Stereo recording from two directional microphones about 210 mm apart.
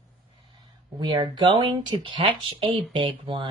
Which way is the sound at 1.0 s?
20° right (ahead or behind).